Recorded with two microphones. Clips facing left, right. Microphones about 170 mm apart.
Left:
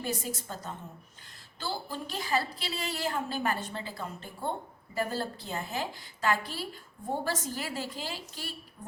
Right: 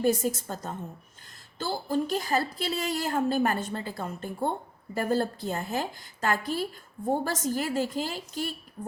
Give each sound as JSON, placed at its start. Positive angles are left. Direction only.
{"t": 0.0, "sound": "a woman's voice", "side_deg": -45}